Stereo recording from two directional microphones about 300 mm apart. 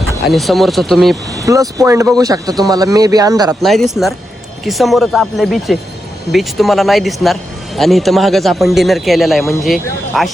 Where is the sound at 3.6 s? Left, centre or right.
Centre.